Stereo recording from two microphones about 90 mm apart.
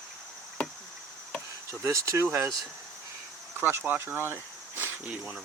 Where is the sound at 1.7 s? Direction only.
35° right (ahead or behind).